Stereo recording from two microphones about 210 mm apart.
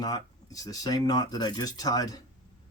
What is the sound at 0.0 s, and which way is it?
Speech, 15° left (ahead or behind).